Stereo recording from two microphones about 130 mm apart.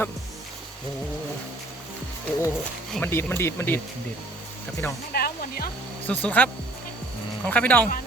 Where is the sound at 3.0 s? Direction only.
15° left (ahead or behind).